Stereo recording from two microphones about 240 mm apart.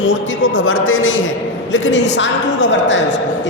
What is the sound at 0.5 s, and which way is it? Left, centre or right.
A woman's voice, left.